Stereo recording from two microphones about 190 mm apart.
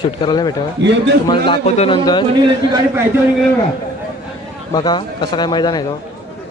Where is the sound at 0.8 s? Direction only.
65° right (ahead or behind).